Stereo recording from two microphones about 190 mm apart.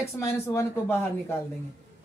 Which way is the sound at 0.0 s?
15° left (ahead or behind).